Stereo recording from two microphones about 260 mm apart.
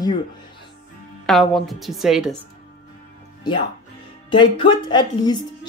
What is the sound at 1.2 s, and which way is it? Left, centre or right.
A woman's voice, centre.